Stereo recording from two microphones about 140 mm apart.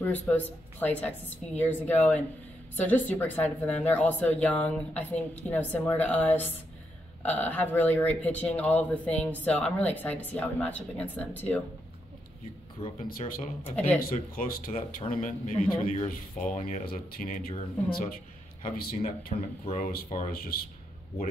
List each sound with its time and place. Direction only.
0.0 s speech: 15° left (ahead or behind)
12.8 s speech: 40° left (ahead or behind)
13.7 s speech: 10° left (ahead or behind)
13.9 s speech: 90° left
15.0 s a man's voice: 70° left (ahead or behind); by 18.1 s 90° left
18.6 s speech: 80° left
19.3 s speech: 45° left (ahead or behind)
19.8 s speech: 85° left